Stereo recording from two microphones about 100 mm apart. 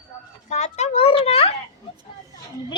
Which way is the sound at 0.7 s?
90° left.